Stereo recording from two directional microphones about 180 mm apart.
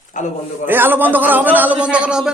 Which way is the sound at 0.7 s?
10° right (ahead or behind).